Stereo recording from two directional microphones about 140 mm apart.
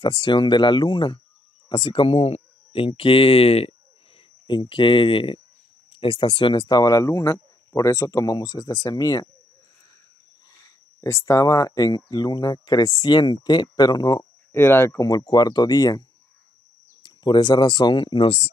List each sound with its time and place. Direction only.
0.0 s speech: 35° left (ahead or behind)
10.5 s speech: 20° left (ahead or behind)
14.5 s speech: 15° left (ahead or behind)
15.0 s speech: 30° left (ahead or behind)
17.0 s speech: 35° left (ahead or behind)